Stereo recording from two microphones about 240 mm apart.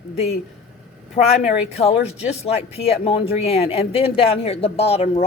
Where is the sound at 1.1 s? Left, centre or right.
Left.